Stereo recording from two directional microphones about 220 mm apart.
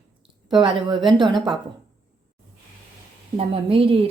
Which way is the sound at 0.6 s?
25° right (ahead or behind).